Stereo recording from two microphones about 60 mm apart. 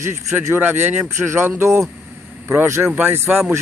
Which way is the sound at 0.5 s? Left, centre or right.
Right.